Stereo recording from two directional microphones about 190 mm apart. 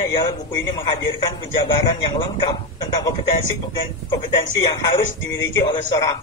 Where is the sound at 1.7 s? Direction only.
20° left (ahead or behind).